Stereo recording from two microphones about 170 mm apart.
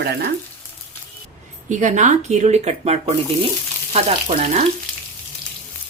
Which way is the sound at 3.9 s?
40° right (ahead or behind).